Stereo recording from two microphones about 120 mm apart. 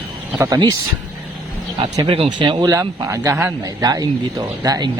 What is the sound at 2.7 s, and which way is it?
Speech, 25° right (ahead or behind).